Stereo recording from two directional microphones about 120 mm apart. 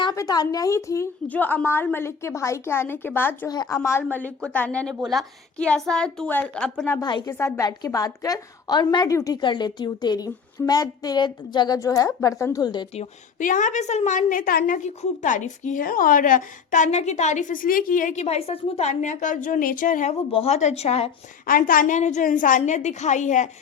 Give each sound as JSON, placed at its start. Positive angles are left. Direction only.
{"t": 0.0, "sound": "a woman's voice", "side_deg": 30}
{"t": 3.5, "sound": "a woman's voice", "side_deg": 35}
{"t": 3.8, "sound": "a woman's voice", "side_deg": 20}
{"t": 7.0, "sound": "a woman's voice", "side_deg": 40}
{"t": 7.3, "sound": "a woman's voice", "side_deg": 20}
{"t": 12.9, "sound": "a woman's voice", "side_deg": 75}
{"t": 20.3, "sound": "a woman's voice", "side_deg": 60}
{"t": 21.8, "sound": "a woman's voice", "side_deg": 80}